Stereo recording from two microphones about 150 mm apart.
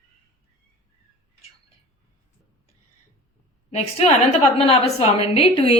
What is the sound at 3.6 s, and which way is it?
A woman's voice, 45° left (ahead or behind).